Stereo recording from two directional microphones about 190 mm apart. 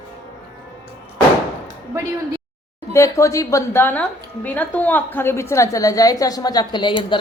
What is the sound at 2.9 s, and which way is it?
A woman's voice, 15° left (ahead or behind).